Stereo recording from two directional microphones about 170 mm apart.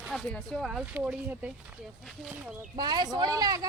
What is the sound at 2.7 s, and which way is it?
Speech, 25° right (ahead or behind).